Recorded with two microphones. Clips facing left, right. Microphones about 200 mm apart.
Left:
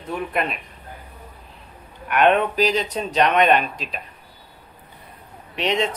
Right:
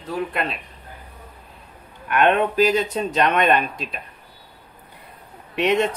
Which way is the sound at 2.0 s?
50° right (ahead or behind).